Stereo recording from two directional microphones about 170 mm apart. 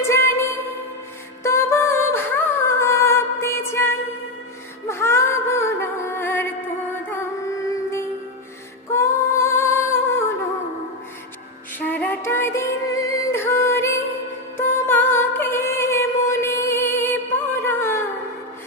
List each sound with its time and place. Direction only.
0.1 s music: 15° left (ahead or behind)
8.9 s female singing: 15° left (ahead or behind)
11.8 s music: 10° left (ahead or behind)